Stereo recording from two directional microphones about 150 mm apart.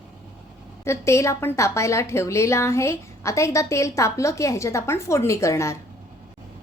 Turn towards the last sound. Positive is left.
turn(degrees=20)  # may be behind; listen again after turning